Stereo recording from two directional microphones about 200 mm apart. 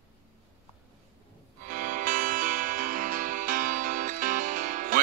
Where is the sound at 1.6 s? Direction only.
40° right (ahead or behind).